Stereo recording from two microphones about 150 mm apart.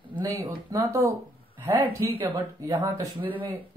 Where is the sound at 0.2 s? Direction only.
20° right (ahead or behind).